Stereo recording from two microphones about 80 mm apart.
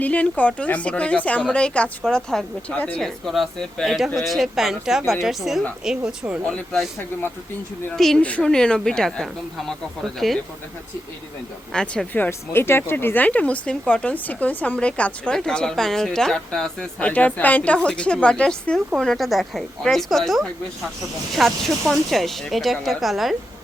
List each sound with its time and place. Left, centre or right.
0.0 s speech: centre
3.0 s speech: centre
7.9 s speech: centre
11.7 s speech: centre
12.1 s speech: left; by 23.3 s centre